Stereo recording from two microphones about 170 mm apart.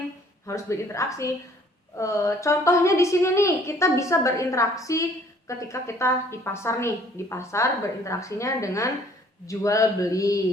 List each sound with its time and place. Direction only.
0.4 s a woman's voice: 15° left (ahead or behind)